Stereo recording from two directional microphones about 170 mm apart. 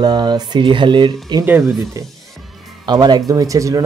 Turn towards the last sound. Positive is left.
turn(degrees=-20)  # may be behind; listen again after turning